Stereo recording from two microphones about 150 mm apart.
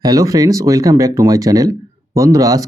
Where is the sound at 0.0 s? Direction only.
25° right (ahead or behind).